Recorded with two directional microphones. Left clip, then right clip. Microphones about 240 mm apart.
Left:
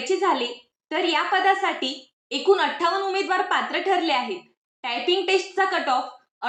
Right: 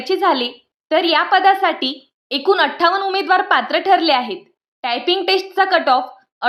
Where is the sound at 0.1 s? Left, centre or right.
Right.